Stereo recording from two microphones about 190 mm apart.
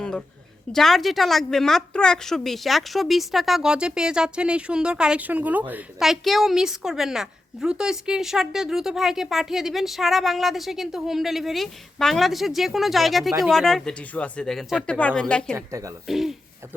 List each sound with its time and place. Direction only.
0.7 s a woman's voice: centre (ahead or behind)
15.5 s speech: 15° right (ahead or behind)
16.0 s a woman's voice: centre (ahead or behind)